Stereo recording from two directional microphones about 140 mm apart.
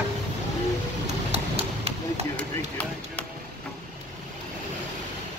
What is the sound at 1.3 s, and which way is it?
Clip-clop, 45° right (ahead or behind).